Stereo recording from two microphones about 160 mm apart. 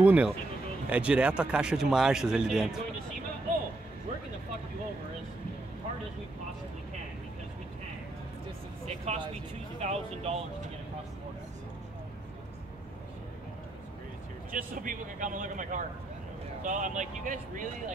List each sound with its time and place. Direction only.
0.0 s a man's voice: 10° right (ahead or behind)
9.0 s speech: 40° right (ahead or behind)
14.5 s speech: 55° right (ahead or behind)